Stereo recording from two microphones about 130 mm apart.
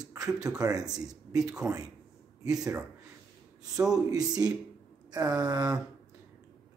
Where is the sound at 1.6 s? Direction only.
30° right (ahead or behind).